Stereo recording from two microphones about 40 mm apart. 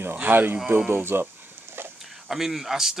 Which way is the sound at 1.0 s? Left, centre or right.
Right.